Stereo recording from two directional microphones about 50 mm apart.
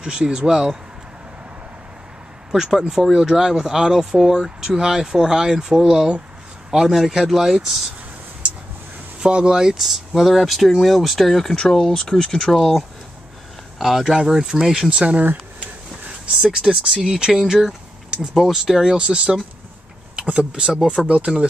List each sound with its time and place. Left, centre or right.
0.0 s speech: centre
2.5 s speech: centre
9.2 s speech: centre
11.5 s speech: centre
12.5 s speech: centre
14.9 s speech: right
16.6 s speech: centre
21.3 s speech: centre